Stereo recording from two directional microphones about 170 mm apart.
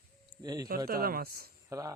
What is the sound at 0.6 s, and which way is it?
Speech, 60° right (ahead or behind).